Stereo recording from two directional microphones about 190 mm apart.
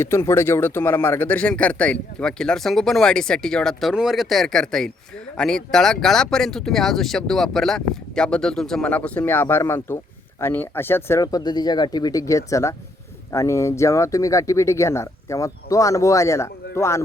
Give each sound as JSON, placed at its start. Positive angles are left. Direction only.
{"t": 0.0, "sound": "speech", "side_deg": 15}